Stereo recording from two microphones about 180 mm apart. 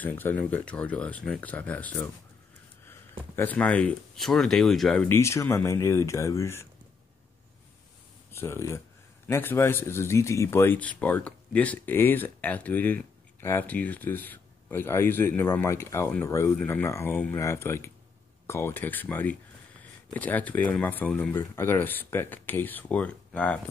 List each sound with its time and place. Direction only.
0.0 s speech: 10° left (ahead or behind)
5.0 s speech: 15° left (ahead or behind)
8.3 s speech: 15° left (ahead or behind)